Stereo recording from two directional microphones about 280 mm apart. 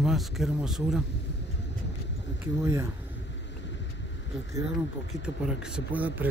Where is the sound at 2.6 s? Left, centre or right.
Centre.